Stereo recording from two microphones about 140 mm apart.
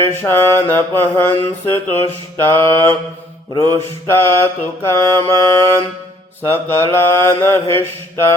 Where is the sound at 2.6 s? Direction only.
20° left (ahead or behind).